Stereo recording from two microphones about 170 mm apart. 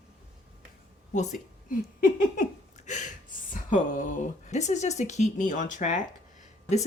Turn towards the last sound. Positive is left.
turn(degrees=45)  # may be behind; listen again after turning